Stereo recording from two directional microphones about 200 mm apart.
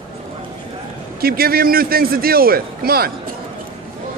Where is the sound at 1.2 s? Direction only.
50° right (ahead or behind).